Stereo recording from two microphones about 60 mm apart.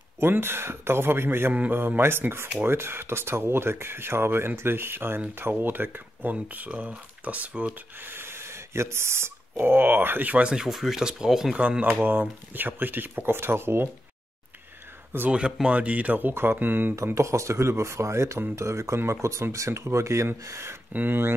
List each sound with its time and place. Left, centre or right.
0.2 s speech: right
1.5 s speech: right
1.8 s speech: right
6.3 s speech: right
8.0 s speech: right; by 11.5 s centre
11.5 s speech: right
15.2 s speech: centre; by 16.9 s right
16.9 s speech: right
20.9 s speech: right